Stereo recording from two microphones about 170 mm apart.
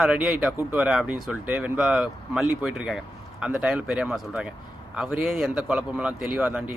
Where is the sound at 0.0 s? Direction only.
5° right (ahead or behind).